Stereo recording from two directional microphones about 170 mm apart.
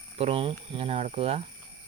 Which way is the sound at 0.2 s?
35° right (ahead or behind).